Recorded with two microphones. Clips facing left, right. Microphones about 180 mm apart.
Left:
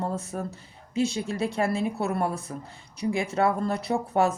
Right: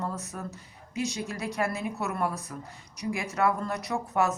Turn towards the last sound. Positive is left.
turn(degrees=30)  # may be behind; listen again after turning